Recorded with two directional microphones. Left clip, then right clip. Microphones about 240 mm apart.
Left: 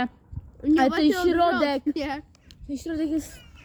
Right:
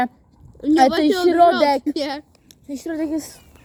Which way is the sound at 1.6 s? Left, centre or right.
Right.